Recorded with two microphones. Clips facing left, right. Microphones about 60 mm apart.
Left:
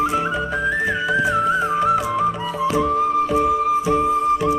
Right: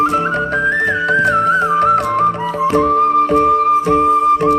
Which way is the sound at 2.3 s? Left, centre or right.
Right.